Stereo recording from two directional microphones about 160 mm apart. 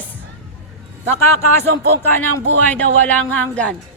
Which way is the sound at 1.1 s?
15° left (ahead or behind).